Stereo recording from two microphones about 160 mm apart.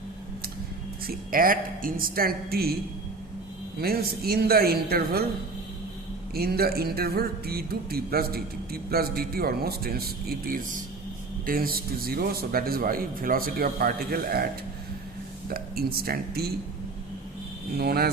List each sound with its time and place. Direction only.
1.0 s a woman's voice: 60° right (ahead or behind)
3.8 s speech: 70° right (ahead or behind)
6.3 s speech: 75° right (ahead or behind)
15.4 s speech: 70° right (ahead or behind)
17.7 s speech: 75° right (ahead or behind)